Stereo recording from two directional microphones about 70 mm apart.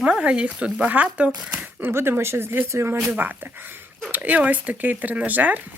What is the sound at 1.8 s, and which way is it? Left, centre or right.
Speech, right.